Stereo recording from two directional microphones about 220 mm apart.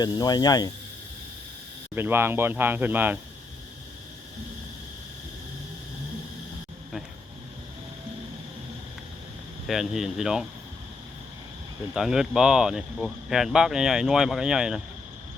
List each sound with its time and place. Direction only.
0.0 s speech: 20° left (ahead or behind)
2.0 s speech: 10° right (ahead or behind)
9.6 s speech: centre (ahead or behind)
11.9 s speech: centre (ahead or behind)